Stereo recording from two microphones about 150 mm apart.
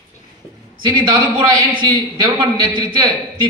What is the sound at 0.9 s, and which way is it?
A man's voice, 25° right (ahead or behind).